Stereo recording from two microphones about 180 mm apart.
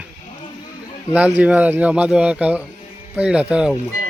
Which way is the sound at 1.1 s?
10° right (ahead or behind).